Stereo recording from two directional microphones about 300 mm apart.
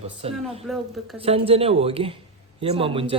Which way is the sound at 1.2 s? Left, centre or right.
Centre.